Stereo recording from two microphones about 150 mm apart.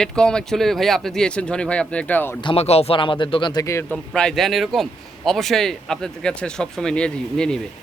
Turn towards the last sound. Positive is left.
turn(degrees=5)  # may be behind; listen again after turning